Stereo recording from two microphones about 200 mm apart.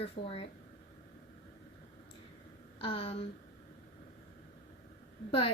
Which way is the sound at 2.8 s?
30° left (ahead or behind).